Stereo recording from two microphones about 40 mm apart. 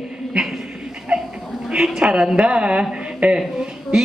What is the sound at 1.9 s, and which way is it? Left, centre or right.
Speech, centre.